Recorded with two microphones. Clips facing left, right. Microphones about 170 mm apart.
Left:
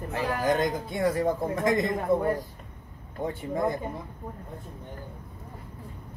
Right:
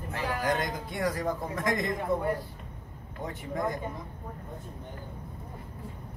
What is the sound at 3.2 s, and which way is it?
Speech, 30° left (ahead or behind).